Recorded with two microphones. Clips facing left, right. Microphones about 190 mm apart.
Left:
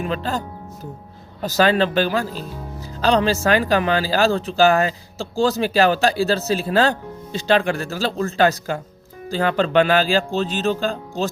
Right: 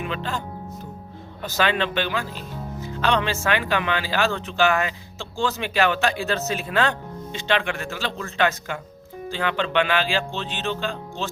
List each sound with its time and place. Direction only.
0.0 s speech: 40° left (ahead or behind)